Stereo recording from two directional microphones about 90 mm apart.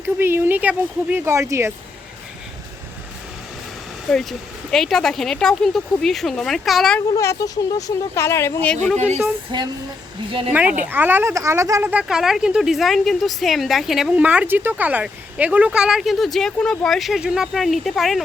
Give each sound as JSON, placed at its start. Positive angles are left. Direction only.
{"t": 0.0, "sound": "speech", "side_deg": -25}
{"t": 4.1, "sound": "speech", "side_deg": 5}
{"t": 7.2, "sound": "speech", "side_deg": 35}
{"t": 9.5, "sound": "speech", "side_deg": -55}
{"t": 10.5, "sound": "speech", "side_deg": -20}
{"t": 11.8, "sound": "speech", "side_deg": -20}
{"t": 12.0, "sound": "speech", "side_deg": -5}
{"t": 14.2, "sound": "speech", "side_deg": -15}